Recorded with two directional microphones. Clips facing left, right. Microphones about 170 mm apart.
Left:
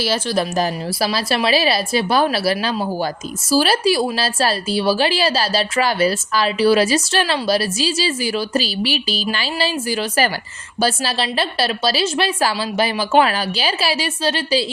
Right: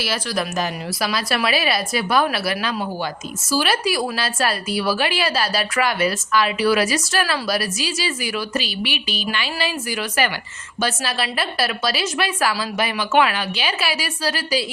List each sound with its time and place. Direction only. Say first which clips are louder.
0.0 s a woman's voice: left 5 dB; 30° left (ahead or behind)